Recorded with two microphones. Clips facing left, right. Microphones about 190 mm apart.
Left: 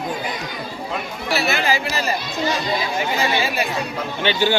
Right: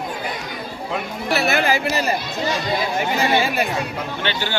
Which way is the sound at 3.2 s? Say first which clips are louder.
Right 4 dB; 50° right (ahead or behind).